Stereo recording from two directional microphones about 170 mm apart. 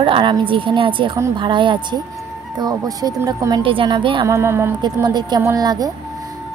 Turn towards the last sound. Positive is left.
turn(degrees=-20)  # may be behind; listen again after turning